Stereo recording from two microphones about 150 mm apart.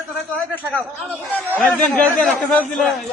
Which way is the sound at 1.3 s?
10° left (ahead or behind).